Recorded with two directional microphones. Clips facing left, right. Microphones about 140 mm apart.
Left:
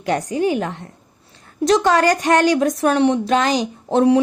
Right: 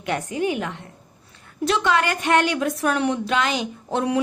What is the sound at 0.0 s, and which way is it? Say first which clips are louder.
Speech: left 5 dB; 35° left (ahead or behind).